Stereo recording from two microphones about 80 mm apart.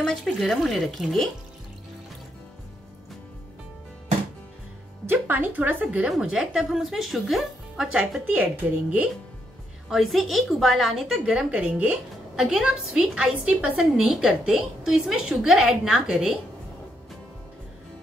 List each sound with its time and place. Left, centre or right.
0.0 s a woman's voice: centre
5.0 s speech: right
5.9 s a woman's voice: centre
9.8 s a woman's voice: centre
12.4 s a woman's voice: centre